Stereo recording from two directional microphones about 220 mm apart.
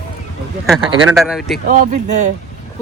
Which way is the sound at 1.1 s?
Centre (ahead or behind).